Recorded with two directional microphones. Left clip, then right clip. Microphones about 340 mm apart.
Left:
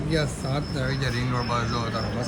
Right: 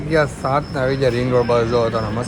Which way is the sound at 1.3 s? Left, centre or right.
Centre.